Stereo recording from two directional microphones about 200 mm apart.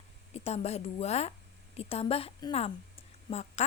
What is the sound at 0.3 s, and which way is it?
A woman's voice, 30° left (ahead or behind).